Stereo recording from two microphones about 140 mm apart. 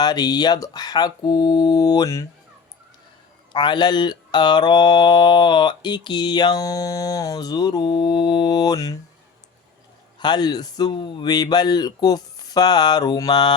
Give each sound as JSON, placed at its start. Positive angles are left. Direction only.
{"t": 0.0, "sound": "speech", "side_deg": 30}
{"t": 3.5, "sound": "mantra", "side_deg": 30}
{"t": 10.2, "sound": "speech", "side_deg": 30}